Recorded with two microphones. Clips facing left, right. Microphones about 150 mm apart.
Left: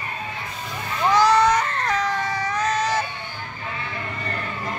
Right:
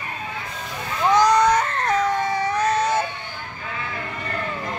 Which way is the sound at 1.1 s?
20° right (ahead or behind).